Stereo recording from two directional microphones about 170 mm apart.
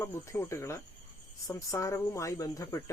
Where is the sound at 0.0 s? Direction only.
15° left (ahead or behind).